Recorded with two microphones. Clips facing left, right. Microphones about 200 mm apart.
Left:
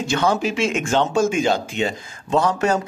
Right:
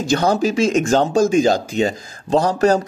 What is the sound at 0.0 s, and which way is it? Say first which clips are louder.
Speech: right 3 dB; 40° right (ahead or behind).